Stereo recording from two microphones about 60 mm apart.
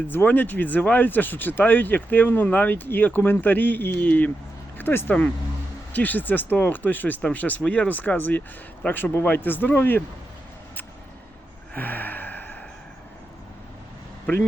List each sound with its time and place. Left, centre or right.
0.1 s speech: left
11.7 s gasp: left